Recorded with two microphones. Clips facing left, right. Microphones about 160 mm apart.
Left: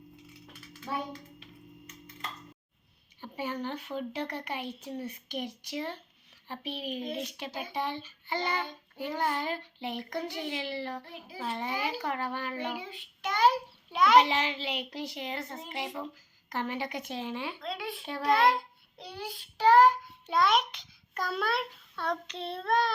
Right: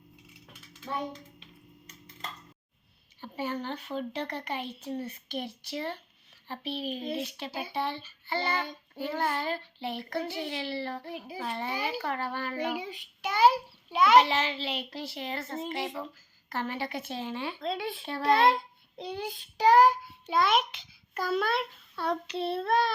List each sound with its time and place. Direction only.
3.2 s child singing: 15° left (ahead or behind)
7.1 s a child's voice: 10° right (ahead or behind)
7.7 s child singing: 15° left (ahead or behind)
11.0 s a child's voice: 15° right (ahead or behind)
11.5 s child singing: 15° left (ahead or behind)
12.5 s a child's voice: 15° right (ahead or behind)
14.3 s child singing: 15° left (ahead or behind)
17.6 s speech: 25° right (ahead or behind)
18.0 s child singing: 10° left (ahead or behind)
18.9 s a child's voice: 20° right (ahead or behind); by 22.9 s 5° right (ahead or behind)